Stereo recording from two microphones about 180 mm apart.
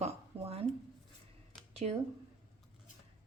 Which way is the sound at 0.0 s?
35° right (ahead or behind).